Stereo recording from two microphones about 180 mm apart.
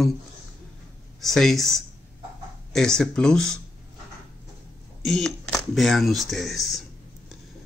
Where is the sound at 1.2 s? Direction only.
Centre (ahead or behind).